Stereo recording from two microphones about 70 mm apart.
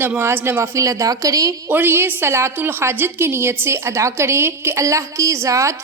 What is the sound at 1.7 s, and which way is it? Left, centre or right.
A woman's voice, right.